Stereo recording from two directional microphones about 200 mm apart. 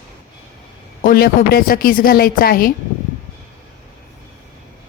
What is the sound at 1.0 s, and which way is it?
A woman's voice, 45° left (ahead or behind).